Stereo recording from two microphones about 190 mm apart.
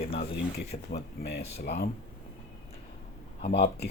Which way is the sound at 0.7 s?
35° left (ahead or behind).